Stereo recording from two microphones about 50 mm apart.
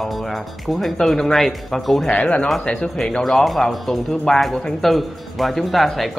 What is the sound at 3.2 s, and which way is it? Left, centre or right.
Speech, centre.